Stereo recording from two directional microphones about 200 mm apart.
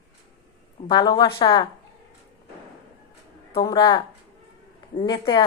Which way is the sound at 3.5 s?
20° left (ahead or behind).